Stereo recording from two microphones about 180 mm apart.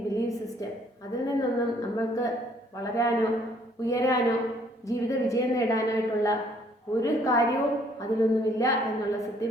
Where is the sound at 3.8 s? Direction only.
20° left (ahead or behind).